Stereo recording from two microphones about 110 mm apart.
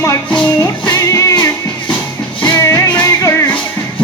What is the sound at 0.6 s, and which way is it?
Music, 30° left (ahead or behind).